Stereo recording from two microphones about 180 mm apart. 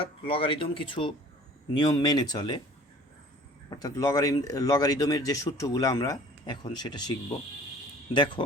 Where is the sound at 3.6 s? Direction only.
20° left (ahead or behind).